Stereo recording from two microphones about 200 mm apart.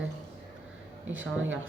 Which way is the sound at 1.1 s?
75° right (ahead or behind).